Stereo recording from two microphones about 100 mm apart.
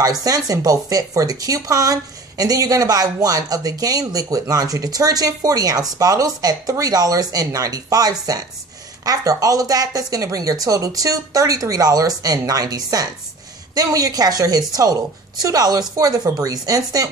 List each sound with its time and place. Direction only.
0.0 s speech: 40° right (ahead or behind)